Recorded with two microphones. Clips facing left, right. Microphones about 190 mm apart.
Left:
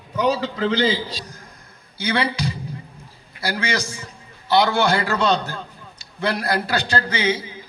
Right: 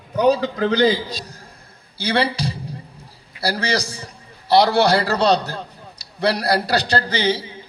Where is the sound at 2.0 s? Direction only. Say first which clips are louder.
Right 2 dB; 30° right (ahead or behind).